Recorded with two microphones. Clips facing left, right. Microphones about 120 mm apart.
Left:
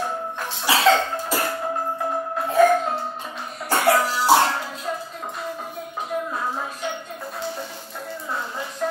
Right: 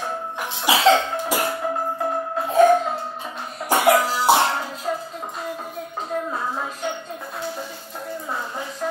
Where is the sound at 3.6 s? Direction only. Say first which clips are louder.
Right 2 dB; 15° right (ahead or behind).